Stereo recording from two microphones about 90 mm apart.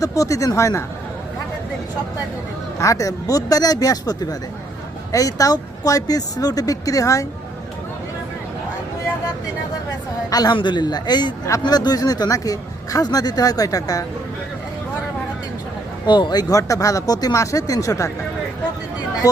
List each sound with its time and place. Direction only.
0.0 s speech: 40° left (ahead or behind)
2.7 s speech: 35° left (ahead or behind)
10.2 s speech: 45° left (ahead or behind)
10.5 s speech: 60° left (ahead or behind); by 14.0 s 40° left (ahead or behind)
16.0 s speech: 55° left (ahead or behind); by 18.1 s 35° left (ahead or behind)
19.2 s speech: 45° left (ahead or behind)